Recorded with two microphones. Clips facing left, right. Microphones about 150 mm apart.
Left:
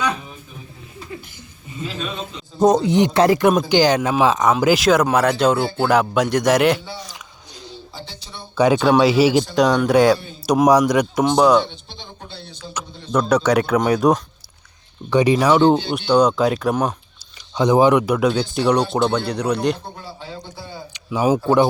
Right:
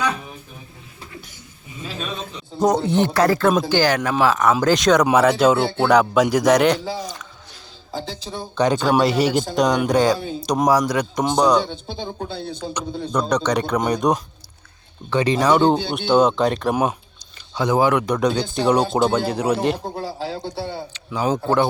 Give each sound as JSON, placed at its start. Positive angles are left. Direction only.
{"t": 2.6, "sound": "speech", "side_deg": 20}
{"t": 4.6, "sound": "speech", "side_deg": 5}
{"t": 8.5, "sound": "speech", "side_deg": 5}
{"t": 11.2, "sound": "speech", "side_deg": 5}
{"t": 12.6, "sound": "a man's voice", "side_deg": -45}
{"t": 13.1, "sound": "speech", "side_deg": 5}
{"t": 15.9, "sound": "speech", "side_deg": 0}
{"t": 17.5, "sound": "speech", "side_deg": 20}
{"t": 18.0, "sound": "speech", "side_deg": 5}
{"t": 20.0, "sound": "speech", "side_deg": -90}
{"t": 20.9, "sound": "speech", "side_deg": 15}